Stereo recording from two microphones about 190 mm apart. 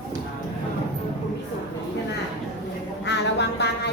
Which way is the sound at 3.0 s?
65° left (ahead or behind).